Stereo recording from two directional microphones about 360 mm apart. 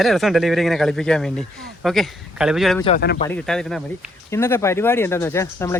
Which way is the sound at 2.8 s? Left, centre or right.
Left.